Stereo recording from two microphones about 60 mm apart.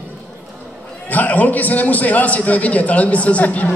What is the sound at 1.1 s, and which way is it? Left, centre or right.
A man's voice, left.